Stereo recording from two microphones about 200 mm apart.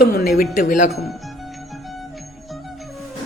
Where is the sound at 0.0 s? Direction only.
50° left (ahead or behind).